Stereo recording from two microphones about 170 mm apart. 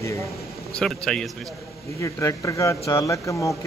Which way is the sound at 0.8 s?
5° left (ahead or behind).